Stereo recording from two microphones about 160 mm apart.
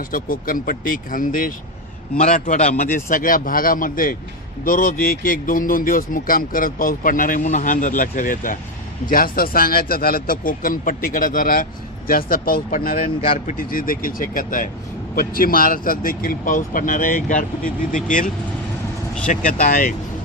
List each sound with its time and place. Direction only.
0.1 s speech: 60° left (ahead or behind)